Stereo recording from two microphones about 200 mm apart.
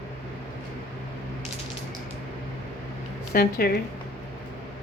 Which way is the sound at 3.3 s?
50° left (ahead or behind).